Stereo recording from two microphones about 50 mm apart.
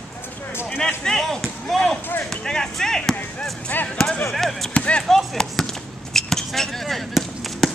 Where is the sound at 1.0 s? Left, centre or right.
Centre.